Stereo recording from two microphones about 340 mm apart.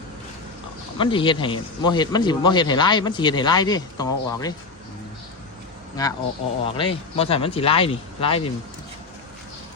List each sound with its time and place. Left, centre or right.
0.9 s speech: centre
6.0 s speech: centre